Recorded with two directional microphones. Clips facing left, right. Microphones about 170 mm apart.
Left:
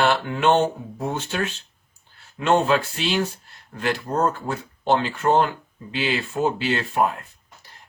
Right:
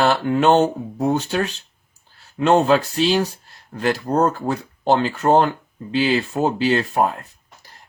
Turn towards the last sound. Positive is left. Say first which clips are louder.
# right 3 dB
turn(degrees=-35)  # may be behind; listen again after turning